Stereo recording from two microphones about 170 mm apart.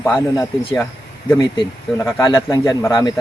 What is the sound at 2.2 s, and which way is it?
Speech, 20° left (ahead or behind).